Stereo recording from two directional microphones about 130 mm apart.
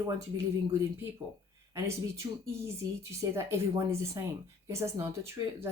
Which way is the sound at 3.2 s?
20° right (ahead or behind).